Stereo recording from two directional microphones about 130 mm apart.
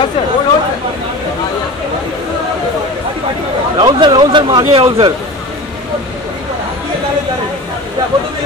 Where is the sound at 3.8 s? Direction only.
35° right (ahead or behind).